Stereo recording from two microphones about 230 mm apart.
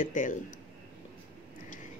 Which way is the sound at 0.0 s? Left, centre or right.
Left.